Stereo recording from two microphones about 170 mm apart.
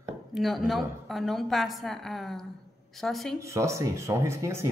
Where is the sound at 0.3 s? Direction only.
Centre (ahead or behind).